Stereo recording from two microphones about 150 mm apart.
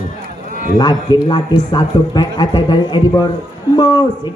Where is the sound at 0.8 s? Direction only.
30° left (ahead or behind).